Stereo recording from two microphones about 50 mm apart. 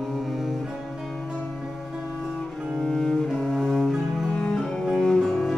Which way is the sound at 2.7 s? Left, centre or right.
Centre.